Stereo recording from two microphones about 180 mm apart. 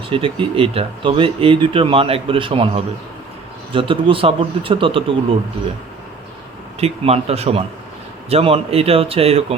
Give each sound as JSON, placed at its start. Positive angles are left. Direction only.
{"t": 0.1, "sound": "a man's voice", "side_deg": -30}
{"t": 6.7, "sound": "speech", "side_deg": -35}